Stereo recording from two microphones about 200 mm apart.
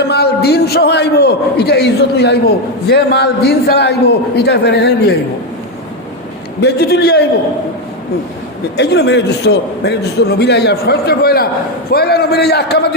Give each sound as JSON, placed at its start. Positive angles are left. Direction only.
{"t": 0.1, "sound": "a man's voice", "side_deg": 55}
{"t": 6.6, "sound": "a man's voice", "side_deg": 50}
{"t": 8.7, "sound": "a man's voice", "side_deg": 55}